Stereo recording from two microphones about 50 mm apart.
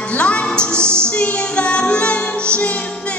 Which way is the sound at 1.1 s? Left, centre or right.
Left.